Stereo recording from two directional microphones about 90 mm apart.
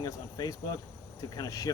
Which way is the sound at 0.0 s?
45° left (ahead or behind).